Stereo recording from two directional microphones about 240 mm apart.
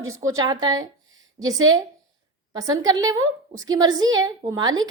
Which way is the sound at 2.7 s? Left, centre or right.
Centre.